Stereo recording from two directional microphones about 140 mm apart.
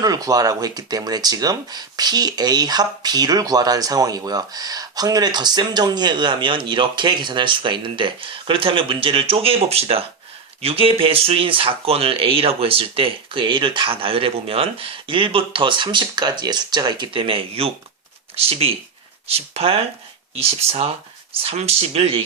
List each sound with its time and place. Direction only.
0.0 s speech: 25° right (ahead or behind); by 22.2 s 45° right (ahead or behind)